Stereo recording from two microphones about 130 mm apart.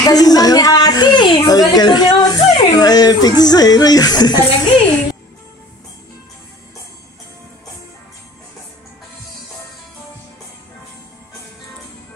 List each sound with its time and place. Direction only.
0.0 s a woman's voice: 30° left (ahead or behind)